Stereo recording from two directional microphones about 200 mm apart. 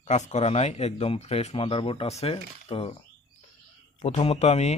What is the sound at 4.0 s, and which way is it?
Speech, 30° left (ahead or behind).